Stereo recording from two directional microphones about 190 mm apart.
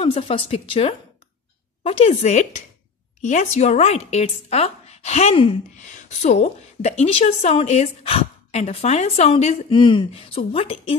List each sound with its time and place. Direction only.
0.0 s a woman's voice: 30° left (ahead or behind)